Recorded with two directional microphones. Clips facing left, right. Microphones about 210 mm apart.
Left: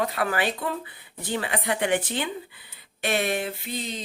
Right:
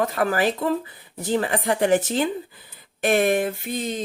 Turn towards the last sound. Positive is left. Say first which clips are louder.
# right 6 dB
turn(degrees=-50)  # may be behind; listen again after turning